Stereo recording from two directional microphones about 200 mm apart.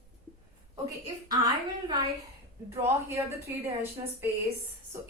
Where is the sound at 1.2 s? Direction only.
20° right (ahead or behind).